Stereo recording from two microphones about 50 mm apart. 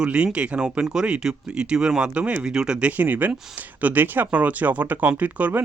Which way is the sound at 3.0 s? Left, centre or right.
Right.